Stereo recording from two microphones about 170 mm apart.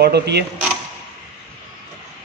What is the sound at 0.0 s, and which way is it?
Speech, 75° right (ahead or behind).